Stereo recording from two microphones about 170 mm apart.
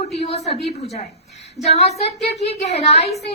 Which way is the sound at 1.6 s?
40° left (ahead or behind).